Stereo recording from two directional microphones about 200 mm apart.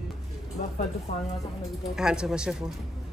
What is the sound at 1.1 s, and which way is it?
Speech, 50° left (ahead or behind).